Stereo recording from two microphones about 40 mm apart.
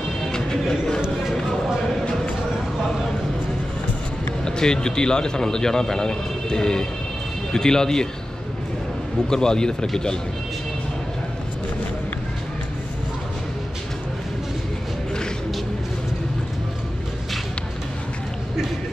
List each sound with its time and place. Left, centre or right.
0.3 s a sound: centre
4.5 s a man's voice: centre
9.3 s a man's voice: centre